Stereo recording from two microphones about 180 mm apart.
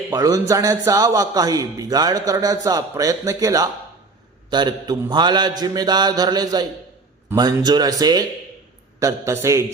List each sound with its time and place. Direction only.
0.1 s a man's voice: 20° right (ahead or behind)